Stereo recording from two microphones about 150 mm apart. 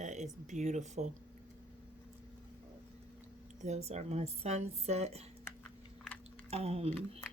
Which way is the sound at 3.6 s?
50° right (ahead or behind).